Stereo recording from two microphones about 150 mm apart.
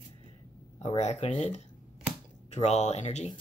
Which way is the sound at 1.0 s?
45° left (ahead or behind).